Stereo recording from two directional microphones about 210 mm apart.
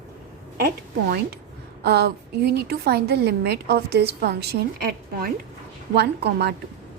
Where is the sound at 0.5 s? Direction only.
45° right (ahead or behind).